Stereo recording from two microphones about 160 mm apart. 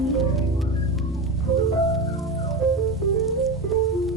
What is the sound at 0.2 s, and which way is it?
Music, centre (ahead or behind).